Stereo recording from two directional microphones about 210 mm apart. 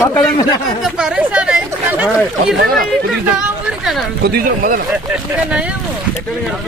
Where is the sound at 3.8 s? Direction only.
Centre (ahead or behind).